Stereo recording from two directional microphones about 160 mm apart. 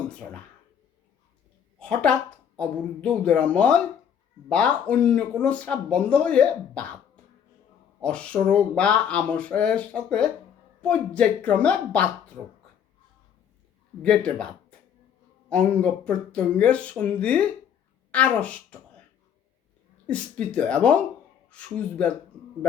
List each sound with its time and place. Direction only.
1.8 s speech: 5° left (ahead or behind)
8.0 s speech: 5° left (ahead or behind)
14.0 s speech: 5° left (ahead or behind)
20.1 s speech: 5° left (ahead or behind)